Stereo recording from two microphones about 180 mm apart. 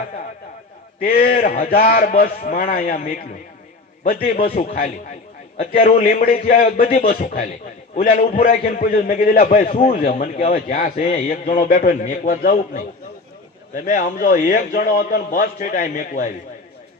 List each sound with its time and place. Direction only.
1.0 s a man's voice: 55° left (ahead or behind)